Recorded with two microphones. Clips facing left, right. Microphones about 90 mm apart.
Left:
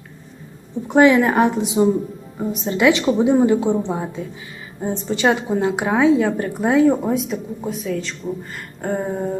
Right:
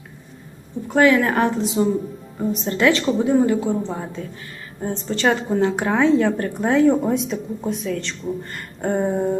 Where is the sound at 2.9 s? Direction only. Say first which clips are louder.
Left 3 dB; 15° left (ahead or behind); by 9.4 s centre (ahead or behind).